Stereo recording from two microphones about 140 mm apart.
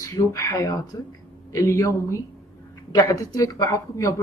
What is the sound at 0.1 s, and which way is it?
A woman's voice, 20° left (ahead or behind).